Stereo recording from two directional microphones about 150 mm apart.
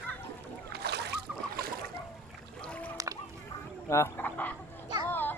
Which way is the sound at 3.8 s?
20° left (ahead or behind).